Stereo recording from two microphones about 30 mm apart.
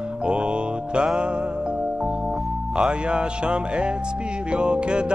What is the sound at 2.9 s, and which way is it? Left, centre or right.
Music, right.